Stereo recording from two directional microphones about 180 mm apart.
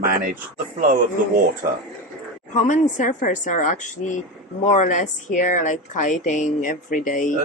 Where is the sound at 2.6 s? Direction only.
45° left (ahead or behind).